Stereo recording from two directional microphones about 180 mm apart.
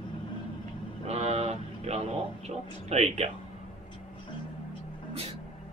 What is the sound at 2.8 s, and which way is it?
Speech, 35° right (ahead or behind).